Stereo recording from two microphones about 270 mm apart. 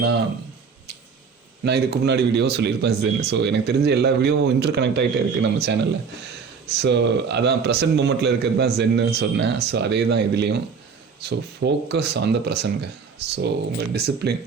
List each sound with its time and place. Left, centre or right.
1.6 s speech: right